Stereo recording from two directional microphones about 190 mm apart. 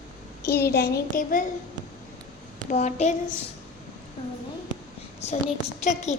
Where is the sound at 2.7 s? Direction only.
40° left (ahead or behind).